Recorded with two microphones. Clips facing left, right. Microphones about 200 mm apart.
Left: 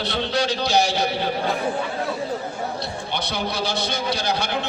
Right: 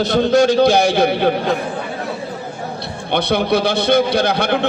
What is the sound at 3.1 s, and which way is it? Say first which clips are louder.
A man's voice: right 12 dB; 60° right (ahead or behind).